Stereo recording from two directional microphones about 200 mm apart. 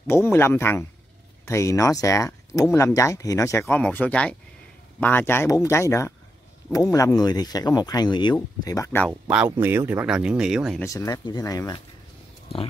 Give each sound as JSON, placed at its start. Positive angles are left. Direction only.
{"t": 0.0, "sound": "speech", "side_deg": 10}
{"t": 9.6, "sound": "speech", "side_deg": -10}
{"t": 10.8, "sound": "speech", "side_deg": 15}